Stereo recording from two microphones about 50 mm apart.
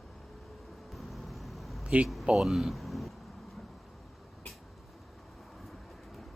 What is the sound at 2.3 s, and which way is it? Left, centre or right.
Speech, centre.